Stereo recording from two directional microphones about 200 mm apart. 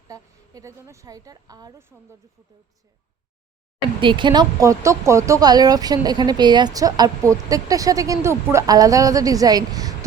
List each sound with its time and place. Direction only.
0.1 s speech: 15° right (ahead or behind)
4.0 s speech: 25° right (ahead or behind)